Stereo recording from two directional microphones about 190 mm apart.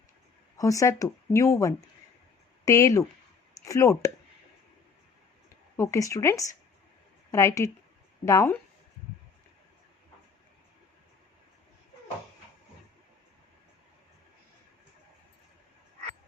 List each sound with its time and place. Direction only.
0.5 s speech: 15° left (ahead or behind)
5.7 s a woman's voice: 15° left (ahead or behind)